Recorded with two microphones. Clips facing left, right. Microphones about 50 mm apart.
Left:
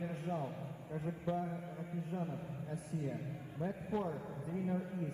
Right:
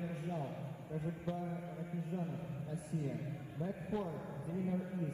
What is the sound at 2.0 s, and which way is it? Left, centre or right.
A man's voice, left.